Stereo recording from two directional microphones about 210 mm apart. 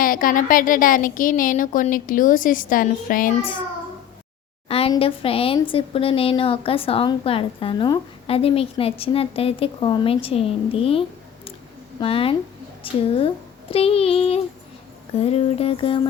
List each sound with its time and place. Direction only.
0.0 s a woman's voice: 40° left (ahead or behind)
4.7 s a woman's voice: 25° left (ahead or behind)